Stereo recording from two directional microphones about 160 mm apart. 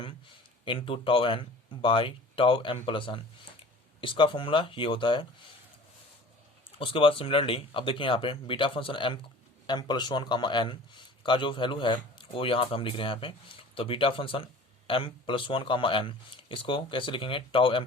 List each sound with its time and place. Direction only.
0.6 s a man's voice: 30° left (ahead or behind)
6.7 s a man's voice: 35° left (ahead or behind)